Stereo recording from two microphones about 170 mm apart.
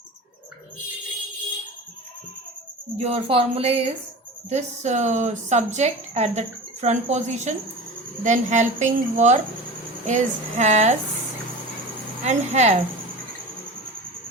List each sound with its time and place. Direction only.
3.0 s a woman's voice: 40° right (ahead or behind)
12.2 s a woman's voice: 45° right (ahead or behind)